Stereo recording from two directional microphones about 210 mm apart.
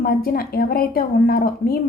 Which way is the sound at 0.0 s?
45° left (ahead or behind).